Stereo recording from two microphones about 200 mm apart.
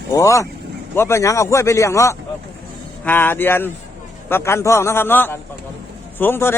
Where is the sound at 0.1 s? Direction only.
15° left (ahead or behind).